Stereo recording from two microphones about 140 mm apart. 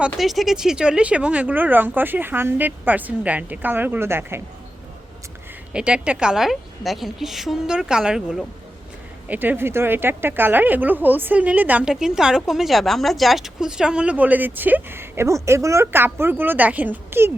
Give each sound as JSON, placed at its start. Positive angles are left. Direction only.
{"t": 0.0, "sound": "a woman's voice", "side_deg": 0}
{"t": 5.7, "sound": "a woman's voice", "side_deg": -5}